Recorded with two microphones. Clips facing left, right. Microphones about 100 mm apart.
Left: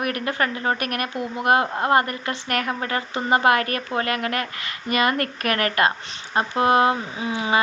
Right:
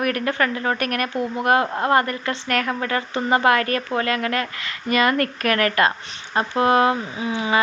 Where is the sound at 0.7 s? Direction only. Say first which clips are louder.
Right 3 dB; 35° right (ahead or behind).